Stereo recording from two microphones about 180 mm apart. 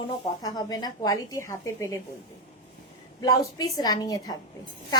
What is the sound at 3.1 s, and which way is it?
A woman's voice, 20° left (ahead or behind).